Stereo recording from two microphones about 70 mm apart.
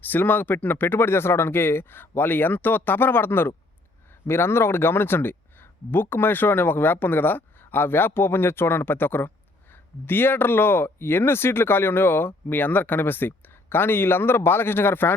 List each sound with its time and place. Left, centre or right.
0.0 s speech: left